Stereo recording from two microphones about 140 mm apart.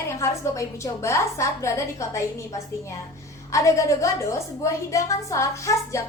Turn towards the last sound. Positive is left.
turn(degrees=20)  # may be behind; listen again after turning